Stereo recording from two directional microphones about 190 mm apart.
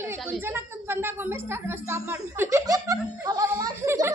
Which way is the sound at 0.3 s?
10° right (ahead or behind).